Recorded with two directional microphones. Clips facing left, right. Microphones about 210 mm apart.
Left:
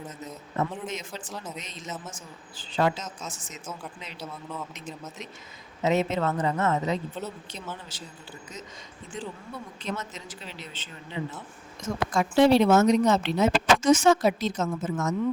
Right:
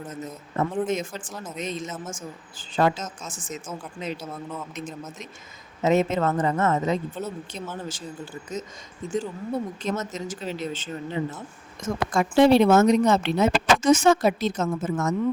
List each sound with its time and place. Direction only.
0.9 s speech: 50° right (ahead or behind)